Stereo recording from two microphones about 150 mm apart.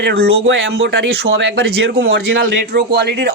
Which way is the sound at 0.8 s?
90° right.